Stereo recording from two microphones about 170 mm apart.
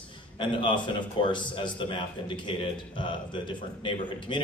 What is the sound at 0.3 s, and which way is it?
A man's voice, 30° left (ahead or behind).